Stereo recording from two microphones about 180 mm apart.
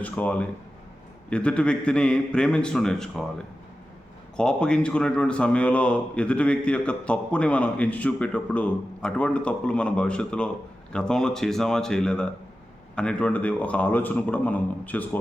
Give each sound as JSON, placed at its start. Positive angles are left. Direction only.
{"t": 0.0, "sound": "a man's voice", "side_deg": 10}
{"t": 4.4, "sound": "a man's voice", "side_deg": 5}